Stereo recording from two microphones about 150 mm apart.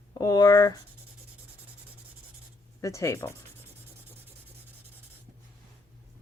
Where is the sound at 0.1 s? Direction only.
25° left (ahead or behind).